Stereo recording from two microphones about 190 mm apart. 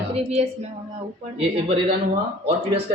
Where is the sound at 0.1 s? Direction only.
30° right (ahead or behind).